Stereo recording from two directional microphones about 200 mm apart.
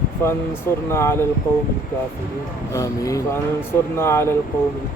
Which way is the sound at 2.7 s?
15° left (ahead or behind).